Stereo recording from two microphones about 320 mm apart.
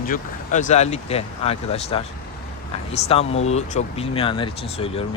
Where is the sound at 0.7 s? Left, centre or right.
Centre.